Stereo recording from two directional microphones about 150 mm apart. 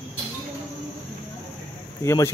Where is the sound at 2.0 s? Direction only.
20° left (ahead or behind).